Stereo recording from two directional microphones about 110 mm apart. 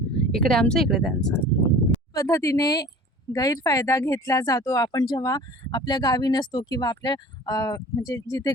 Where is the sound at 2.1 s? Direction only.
30° left (ahead or behind).